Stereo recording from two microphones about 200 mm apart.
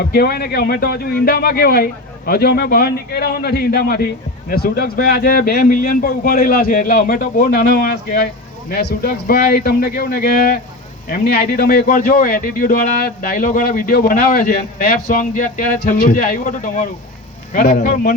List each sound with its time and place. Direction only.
0.1 s a man's voice: 50° left (ahead or behind)